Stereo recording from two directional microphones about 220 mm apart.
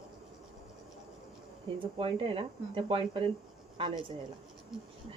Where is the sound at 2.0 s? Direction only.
25° right (ahead or behind).